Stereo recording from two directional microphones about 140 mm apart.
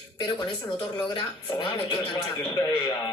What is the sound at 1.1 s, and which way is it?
Speech, 35° left (ahead or behind).